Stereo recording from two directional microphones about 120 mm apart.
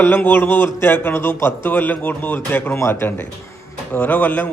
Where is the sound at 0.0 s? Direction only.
15° left (ahead or behind).